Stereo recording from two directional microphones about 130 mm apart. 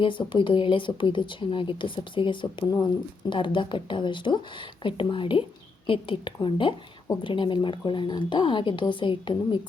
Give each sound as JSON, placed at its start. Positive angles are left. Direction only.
{"t": 0.0, "sound": "speech", "side_deg": 40}